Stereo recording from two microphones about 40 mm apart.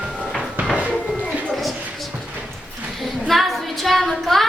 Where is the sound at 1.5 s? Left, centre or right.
Centre.